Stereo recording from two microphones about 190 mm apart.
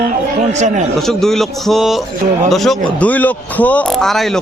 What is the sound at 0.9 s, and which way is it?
A man's voice, centre (ahead or behind).